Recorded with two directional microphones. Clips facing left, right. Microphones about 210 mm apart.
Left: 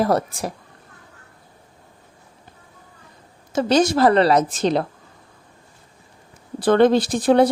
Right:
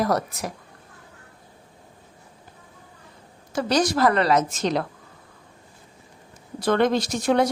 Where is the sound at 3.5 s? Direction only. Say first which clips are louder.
Left 5 dB; 25° left (ahead or behind).